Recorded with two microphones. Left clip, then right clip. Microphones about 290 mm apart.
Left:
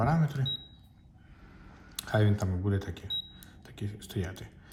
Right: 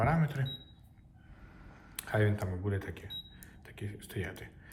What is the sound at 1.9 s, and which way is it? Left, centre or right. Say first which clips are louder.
Speech: left 2 dB; centre.